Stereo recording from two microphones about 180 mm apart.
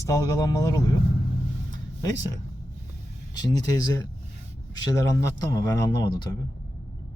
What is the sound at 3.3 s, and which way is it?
Speech, 20° left (ahead or behind).